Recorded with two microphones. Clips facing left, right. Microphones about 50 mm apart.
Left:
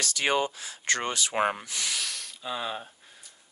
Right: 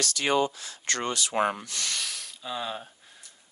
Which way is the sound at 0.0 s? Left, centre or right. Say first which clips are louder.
Right 1 dB; centre.